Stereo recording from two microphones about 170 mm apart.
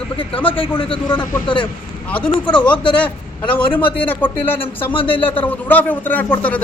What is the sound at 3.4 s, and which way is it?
A man's voice, 10° left (ahead or behind).